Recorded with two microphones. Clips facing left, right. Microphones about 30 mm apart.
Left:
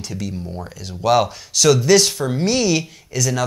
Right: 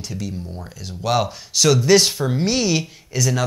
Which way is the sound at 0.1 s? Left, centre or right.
Centre.